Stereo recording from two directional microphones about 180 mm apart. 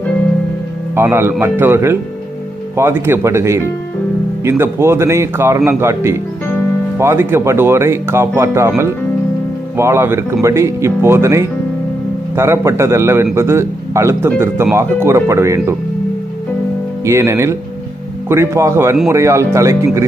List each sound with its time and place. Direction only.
0.9 s speech: 15° right (ahead or behind)
9.7 s speech: 15° right (ahead or behind)
17.1 s speech: 15° right (ahead or behind)